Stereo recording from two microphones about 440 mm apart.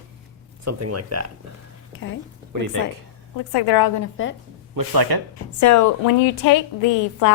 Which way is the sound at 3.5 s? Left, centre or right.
Left.